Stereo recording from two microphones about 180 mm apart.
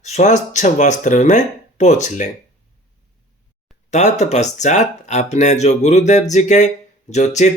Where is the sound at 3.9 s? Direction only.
40° left (ahead or behind).